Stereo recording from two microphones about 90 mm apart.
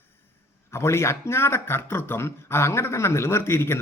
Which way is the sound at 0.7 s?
30° left (ahead or behind).